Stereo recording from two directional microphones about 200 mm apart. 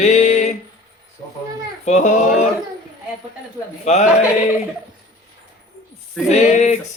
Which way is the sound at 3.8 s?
35° left (ahead or behind).